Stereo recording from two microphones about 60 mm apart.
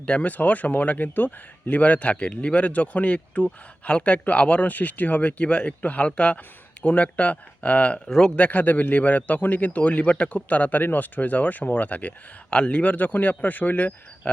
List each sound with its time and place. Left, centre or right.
0.0 s speech: left
8.0 s a man's voice: centre
8.4 s speech: left